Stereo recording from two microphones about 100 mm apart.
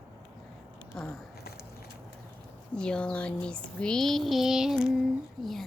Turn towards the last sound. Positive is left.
turn(degrees=0)  # may be behind; listen again after turning